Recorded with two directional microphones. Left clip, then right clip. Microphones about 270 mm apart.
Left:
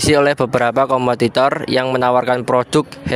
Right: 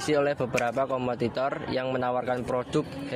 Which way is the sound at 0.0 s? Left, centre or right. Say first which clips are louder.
Left 12 dB; left.